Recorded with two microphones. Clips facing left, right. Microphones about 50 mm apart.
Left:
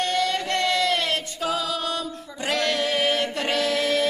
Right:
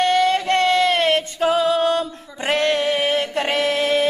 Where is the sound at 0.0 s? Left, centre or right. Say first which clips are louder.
Right 7 dB; right.